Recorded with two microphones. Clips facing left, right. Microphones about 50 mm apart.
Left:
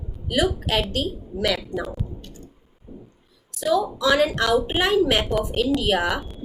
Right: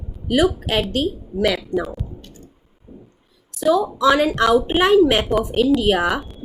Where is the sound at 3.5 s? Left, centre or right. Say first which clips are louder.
Right 4 dB; right.